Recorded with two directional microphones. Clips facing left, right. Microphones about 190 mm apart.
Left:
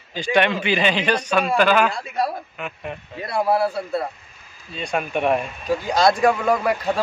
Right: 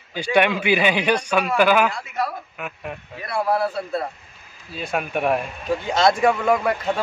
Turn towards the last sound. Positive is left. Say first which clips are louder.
# even
turn(degrees=0)  # may be behind; listen again after turning